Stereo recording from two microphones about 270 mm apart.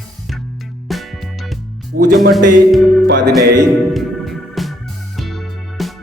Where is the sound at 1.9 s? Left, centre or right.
Right.